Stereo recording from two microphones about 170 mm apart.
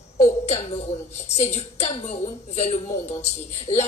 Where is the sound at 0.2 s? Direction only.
40° left (ahead or behind).